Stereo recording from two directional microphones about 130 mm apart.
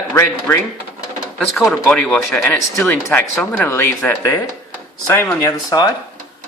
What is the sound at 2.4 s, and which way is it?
Speech, 15° left (ahead or behind).